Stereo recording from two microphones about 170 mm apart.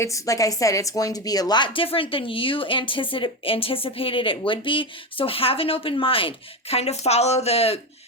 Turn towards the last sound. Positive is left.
turn(degrees=35)  # may be behind; listen again after turning